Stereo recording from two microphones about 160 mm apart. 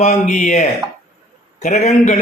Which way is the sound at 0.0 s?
50° left (ahead or behind).